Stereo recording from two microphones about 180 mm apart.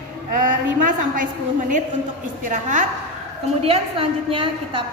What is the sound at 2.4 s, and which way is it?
Speech, 45° right (ahead or behind).